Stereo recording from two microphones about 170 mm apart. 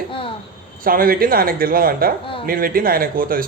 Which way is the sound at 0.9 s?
60° right (ahead or behind).